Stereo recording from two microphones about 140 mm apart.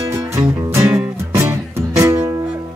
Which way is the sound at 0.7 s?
20° right (ahead or behind).